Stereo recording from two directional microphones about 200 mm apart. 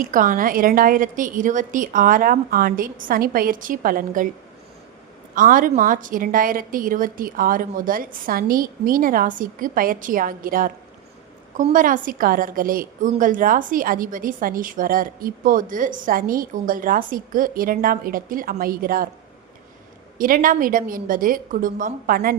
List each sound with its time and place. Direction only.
0.0 s a woman's voice: 40° right (ahead or behind)
5.3 s a woman's voice: 45° right (ahead or behind)
20.1 s a woman's voice: 45° right (ahead or behind)